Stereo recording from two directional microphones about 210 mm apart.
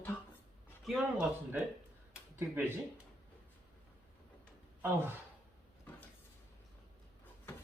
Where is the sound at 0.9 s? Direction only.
Centre (ahead or behind).